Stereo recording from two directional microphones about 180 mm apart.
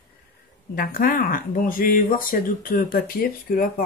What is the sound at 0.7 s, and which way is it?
Speech, 50° left (ahead or behind).